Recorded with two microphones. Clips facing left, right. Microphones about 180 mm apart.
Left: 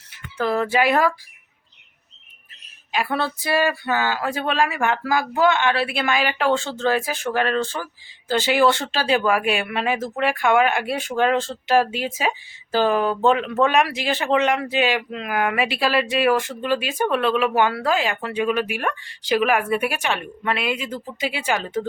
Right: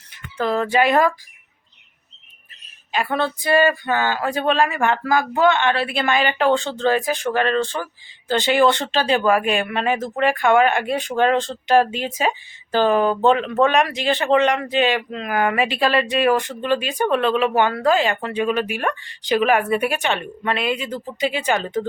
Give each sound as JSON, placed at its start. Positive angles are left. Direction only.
{"t": 0.3, "sound": "speech", "side_deg": 5}
{"t": 2.9, "sound": "speech", "side_deg": 5}